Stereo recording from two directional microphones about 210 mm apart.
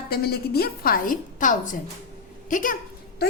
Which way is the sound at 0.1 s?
45° left (ahead or behind).